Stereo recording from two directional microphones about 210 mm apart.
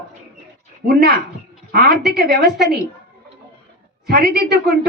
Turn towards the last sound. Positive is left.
turn(degrees=-50)  # may be behind; listen again after turning